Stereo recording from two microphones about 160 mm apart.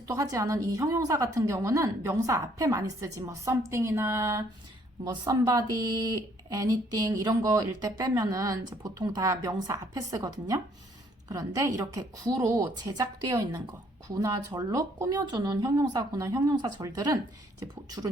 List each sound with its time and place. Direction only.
0.1 s speech: 20° right (ahead or behind)